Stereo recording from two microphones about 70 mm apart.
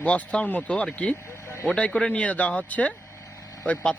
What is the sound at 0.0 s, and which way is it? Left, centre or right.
A man's voice, centre.